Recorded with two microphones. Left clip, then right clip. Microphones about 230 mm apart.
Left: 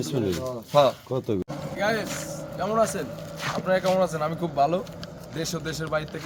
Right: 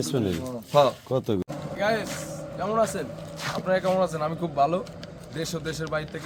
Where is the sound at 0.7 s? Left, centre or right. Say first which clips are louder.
Left 1 dB; right.